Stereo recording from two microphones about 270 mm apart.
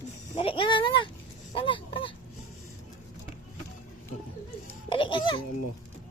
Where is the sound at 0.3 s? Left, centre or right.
Centre.